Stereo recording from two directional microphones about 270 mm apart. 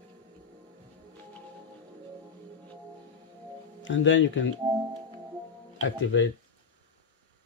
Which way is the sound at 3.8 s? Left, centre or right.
Left.